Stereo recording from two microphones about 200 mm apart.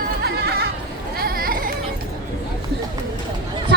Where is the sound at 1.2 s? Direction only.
45° right (ahead or behind).